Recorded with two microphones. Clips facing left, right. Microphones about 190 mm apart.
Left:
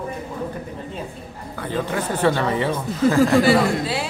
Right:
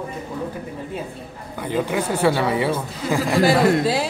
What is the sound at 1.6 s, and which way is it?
Speech, 10° right (ahead or behind).